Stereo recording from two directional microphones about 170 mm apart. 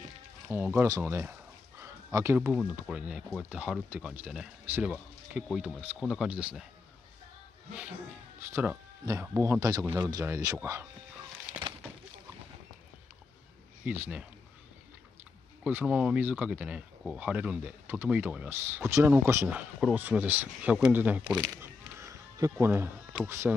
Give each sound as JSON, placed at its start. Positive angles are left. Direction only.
{"t": 0.5, "sound": "speech", "side_deg": -10}
{"t": 1.8, "sound": "a sound", "side_deg": -15}
{"t": 2.5, "sound": "speech", "side_deg": -5}
{"t": 8.4, "sound": "speech", "side_deg": -15}
{"t": 13.8, "sound": "speech", "side_deg": -10}
{"t": 15.6, "sound": "speech", "side_deg": -10}